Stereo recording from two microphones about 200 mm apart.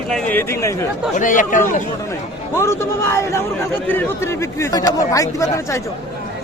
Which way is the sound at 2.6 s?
15° left (ahead or behind).